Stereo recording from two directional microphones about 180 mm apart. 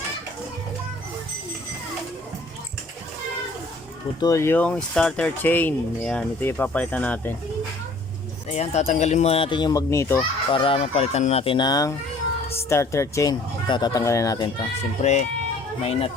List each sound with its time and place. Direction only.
4.2 s speech: 15° left (ahead or behind)
8.4 s speech: 40° left (ahead or behind); by 10.2 s 15° left (ahead or behind)
10.5 s speech: 30° left (ahead or behind)
15.0 s speech: 40° left (ahead or behind)